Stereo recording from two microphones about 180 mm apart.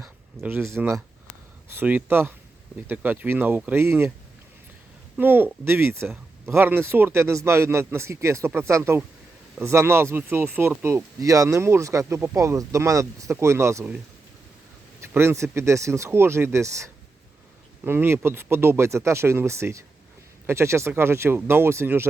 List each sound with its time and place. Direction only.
0.0 s speech: 10° right (ahead or behind)
5.1 s speech: 10° right (ahead or behind)
15.1 s speech: 15° right (ahead or behind)